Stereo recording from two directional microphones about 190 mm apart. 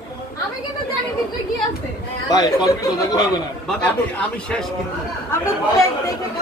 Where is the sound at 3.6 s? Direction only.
5° left (ahead or behind).